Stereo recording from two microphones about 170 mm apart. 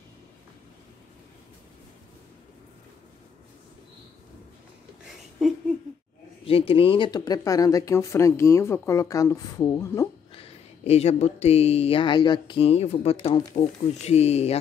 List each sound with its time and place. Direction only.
6.4 s speech: 35° left (ahead or behind); by 10.0 s 15° left (ahead or behind)
10.3 s speech: 35° left (ahead or behind)